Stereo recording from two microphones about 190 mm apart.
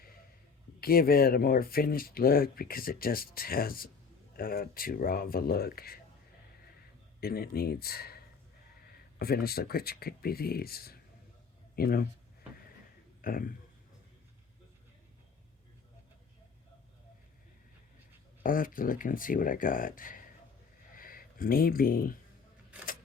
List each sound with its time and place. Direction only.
0.8 s speech: 50° left (ahead or behind)
7.2 s speech: 55° left (ahead or behind)
13.2 s speech: 50° left (ahead or behind)
18.4 s speech: 45° left (ahead or behind)
20.9 s a sound: 50° left (ahead or behind)